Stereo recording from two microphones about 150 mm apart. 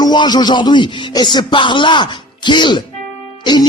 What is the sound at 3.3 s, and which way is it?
Music, 30° left (ahead or behind).